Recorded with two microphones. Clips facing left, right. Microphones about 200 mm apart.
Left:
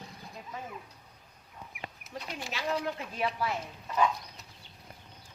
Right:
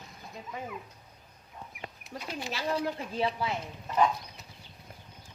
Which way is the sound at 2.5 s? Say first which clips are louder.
Right 1 dB; 30° right (ahead or behind).